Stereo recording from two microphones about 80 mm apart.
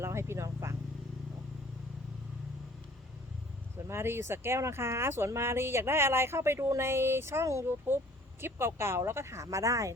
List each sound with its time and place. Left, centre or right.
0.0 s vehicle: right
3.8 s speech: right